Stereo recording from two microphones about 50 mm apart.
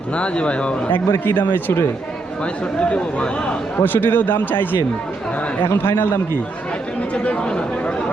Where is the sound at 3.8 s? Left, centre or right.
Left.